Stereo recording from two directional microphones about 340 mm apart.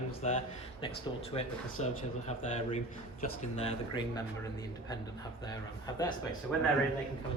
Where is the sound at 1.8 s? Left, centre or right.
Centre.